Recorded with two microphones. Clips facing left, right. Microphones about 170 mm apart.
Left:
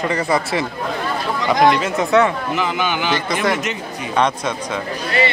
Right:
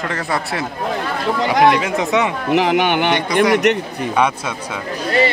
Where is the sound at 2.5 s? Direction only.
70° right (ahead or behind).